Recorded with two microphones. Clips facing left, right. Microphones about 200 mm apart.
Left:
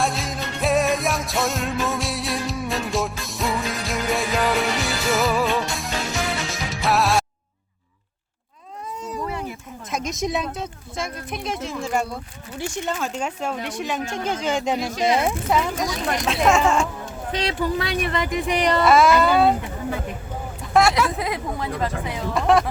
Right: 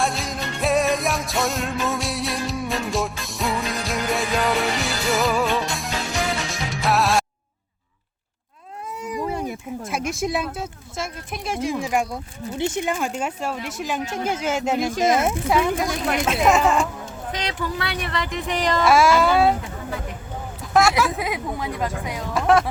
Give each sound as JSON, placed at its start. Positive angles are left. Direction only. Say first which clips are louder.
{"t": 0.0, "sound": "music", "louder": "even", "side_deg": 0}
{"t": 9.0, "sound": "cat", "louder": "right 3 dB", "side_deg": -15}
{"t": 9.9, "sound": "speech", "louder": "even", "side_deg": -10}
{"t": 14.8, "sound": "speech", "louder": "right 2 dB", "side_deg": -50}
{"t": 15.2, "sound": "speech", "louder": "right 1 dB", "side_deg": -5}
{"t": 17.3, "sound": "speech", "louder": "left 5 dB", "side_deg": 25}
{"t": 18.2, "sound": "speech", "louder": "left 1 dB", "side_deg": 15}
{"t": 18.9, "sound": "speech", "louder": "even", "side_deg": -5}
{"t": 20.7, "sound": "speech", "louder": "even", "side_deg": 0}